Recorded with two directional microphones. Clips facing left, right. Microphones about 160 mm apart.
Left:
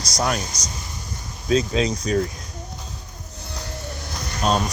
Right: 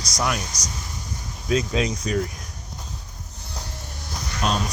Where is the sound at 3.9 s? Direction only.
70° left (ahead or behind).